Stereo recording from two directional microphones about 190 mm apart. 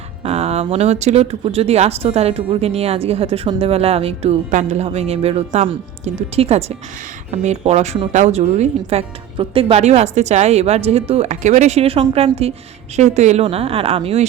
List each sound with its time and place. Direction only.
0.2 s speech: 30° right (ahead or behind)